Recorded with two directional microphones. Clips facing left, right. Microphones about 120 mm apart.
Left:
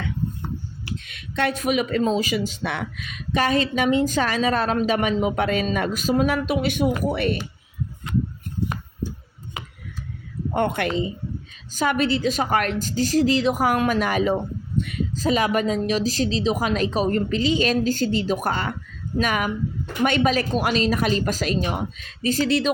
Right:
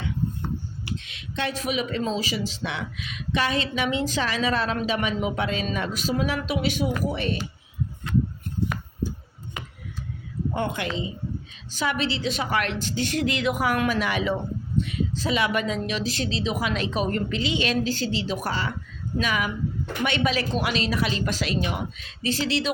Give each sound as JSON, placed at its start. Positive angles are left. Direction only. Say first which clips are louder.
{"t": 0.9, "sound": "speech", "louder": "left 1 dB", "side_deg": 50}
{"t": 10.5, "sound": "speech", "louder": "left 6 dB", "side_deg": 60}
{"t": 11.7, "sound": "speech", "louder": "left 5 dB", "side_deg": 45}
{"t": 14.8, "sound": "speech", "louder": "left 1 dB", "side_deg": 55}